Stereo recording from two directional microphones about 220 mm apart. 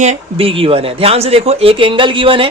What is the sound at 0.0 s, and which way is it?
Speech, 30° right (ahead or behind).